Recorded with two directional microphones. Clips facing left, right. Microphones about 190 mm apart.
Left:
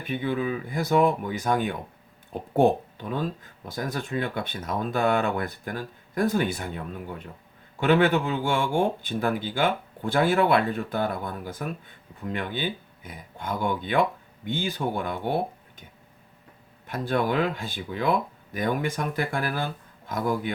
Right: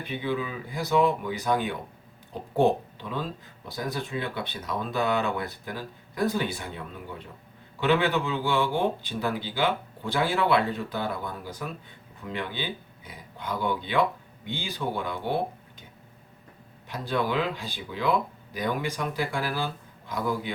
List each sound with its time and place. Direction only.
0.1 s speech: 50° left (ahead or behind)
7.8 s speech: 45° left (ahead or behind)
16.8 s speech: 50° left (ahead or behind)